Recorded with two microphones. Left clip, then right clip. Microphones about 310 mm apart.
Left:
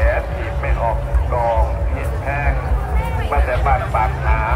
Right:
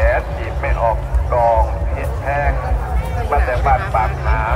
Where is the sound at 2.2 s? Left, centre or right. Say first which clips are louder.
Right 4 dB; right.